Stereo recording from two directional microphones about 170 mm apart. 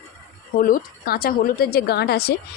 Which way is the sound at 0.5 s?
55° left (ahead or behind).